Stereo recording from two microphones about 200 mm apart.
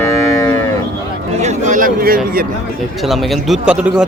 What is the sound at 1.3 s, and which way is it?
Speech, 35° right (ahead or behind).